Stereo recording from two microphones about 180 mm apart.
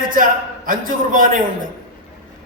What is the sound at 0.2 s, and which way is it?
A man's voice, 50° right (ahead or behind).